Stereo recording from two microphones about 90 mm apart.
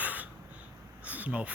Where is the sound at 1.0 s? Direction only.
15° right (ahead or behind).